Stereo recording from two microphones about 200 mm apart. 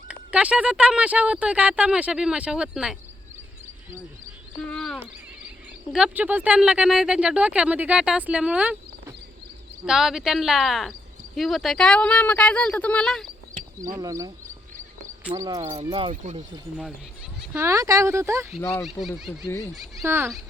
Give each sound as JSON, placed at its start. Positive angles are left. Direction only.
{"t": 0.1, "sound": "speech", "side_deg": -5}
{"t": 4.7, "sound": "speech", "side_deg": 5}
{"t": 13.8, "sound": "speech", "side_deg": -15}
{"t": 15.8, "sound": "speech", "side_deg": -25}
{"t": 17.4, "sound": "speech", "side_deg": -10}
{"t": 18.8, "sound": "speech", "side_deg": 0}
{"t": 19.5, "sound": "speech", "side_deg": 10}
{"t": 19.7, "sound": "speech", "side_deg": 0}